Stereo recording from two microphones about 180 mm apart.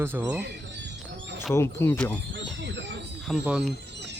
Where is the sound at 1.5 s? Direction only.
15° left (ahead or behind).